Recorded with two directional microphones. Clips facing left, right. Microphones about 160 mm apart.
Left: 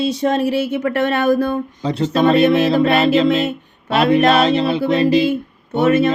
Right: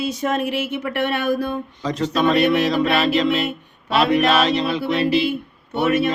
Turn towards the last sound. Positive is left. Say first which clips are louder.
# left 5 dB
turn(degrees=45)  # may be behind; listen again after turning